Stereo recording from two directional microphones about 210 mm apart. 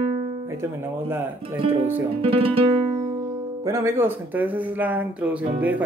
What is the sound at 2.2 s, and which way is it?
Music, 25° right (ahead or behind).